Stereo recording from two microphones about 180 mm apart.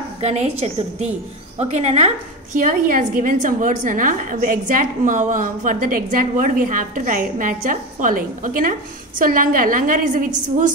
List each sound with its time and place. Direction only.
0.2 s a woman's voice: 35° right (ahead or behind)